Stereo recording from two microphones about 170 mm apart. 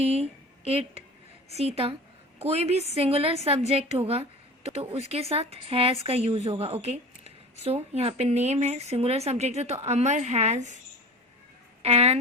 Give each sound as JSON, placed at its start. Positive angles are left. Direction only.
{"t": 0.0, "sound": "a woman's voice", "side_deg": -35}
{"t": 11.8, "sound": "speech", "side_deg": -35}